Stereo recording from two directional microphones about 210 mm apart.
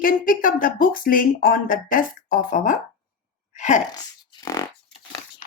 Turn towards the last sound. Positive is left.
turn(degrees=15)  # may be behind; listen again after turning